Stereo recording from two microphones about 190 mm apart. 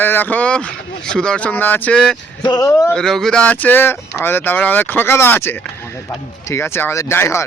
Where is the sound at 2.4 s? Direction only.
20° left (ahead or behind).